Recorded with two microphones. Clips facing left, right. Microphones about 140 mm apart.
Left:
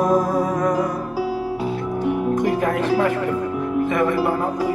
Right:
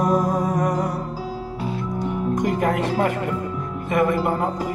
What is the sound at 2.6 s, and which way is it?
Speech, 40° right (ahead or behind).